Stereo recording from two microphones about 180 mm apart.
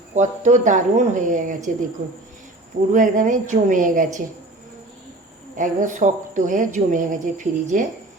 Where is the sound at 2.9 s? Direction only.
45° right (ahead or behind).